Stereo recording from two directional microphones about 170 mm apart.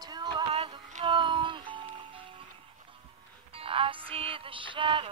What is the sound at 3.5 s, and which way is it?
Music, 35° right (ahead or behind).